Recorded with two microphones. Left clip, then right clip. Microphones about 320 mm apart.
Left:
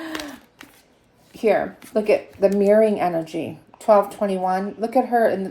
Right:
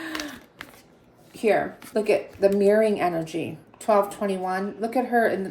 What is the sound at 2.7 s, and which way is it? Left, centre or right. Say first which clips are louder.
Speech: left 3 dB; left.